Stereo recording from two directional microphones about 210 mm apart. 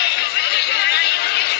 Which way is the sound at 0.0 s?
55° left (ahead or behind).